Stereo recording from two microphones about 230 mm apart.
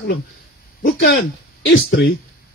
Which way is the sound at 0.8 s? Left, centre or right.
Left.